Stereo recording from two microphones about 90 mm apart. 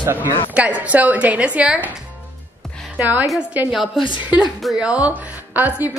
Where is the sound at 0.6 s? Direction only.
15° right (ahead or behind).